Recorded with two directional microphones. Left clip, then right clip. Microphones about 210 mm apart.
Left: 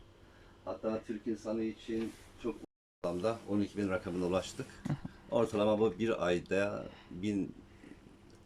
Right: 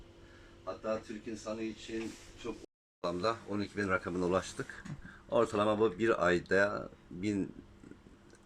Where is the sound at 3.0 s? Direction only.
10° left (ahead or behind).